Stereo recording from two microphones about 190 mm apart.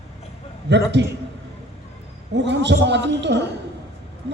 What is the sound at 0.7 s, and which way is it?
Speech, 65° right (ahead or behind).